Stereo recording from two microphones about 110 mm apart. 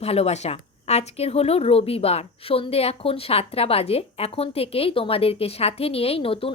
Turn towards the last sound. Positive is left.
turn(degrees=55)  # may be behind; listen again after turning